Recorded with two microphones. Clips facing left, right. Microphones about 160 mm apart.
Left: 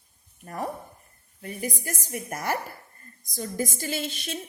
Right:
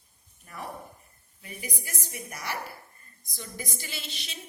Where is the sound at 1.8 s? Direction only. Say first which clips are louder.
Left 7 dB; 45° left (ahead or behind).